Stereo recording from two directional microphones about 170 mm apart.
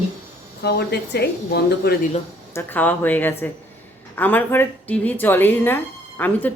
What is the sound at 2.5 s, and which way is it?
Speech, 10° left (ahead or behind).